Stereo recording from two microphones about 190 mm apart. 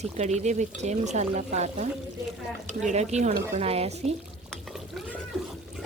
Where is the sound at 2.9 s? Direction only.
35° right (ahead or behind).